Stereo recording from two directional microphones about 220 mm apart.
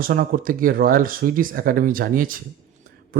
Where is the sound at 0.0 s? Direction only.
40° right (ahead or behind).